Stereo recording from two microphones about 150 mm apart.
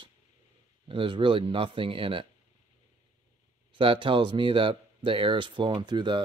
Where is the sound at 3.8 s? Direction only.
35° right (ahead or behind).